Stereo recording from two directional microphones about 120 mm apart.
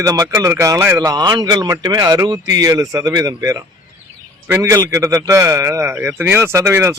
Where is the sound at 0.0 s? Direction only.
30° right (ahead or behind).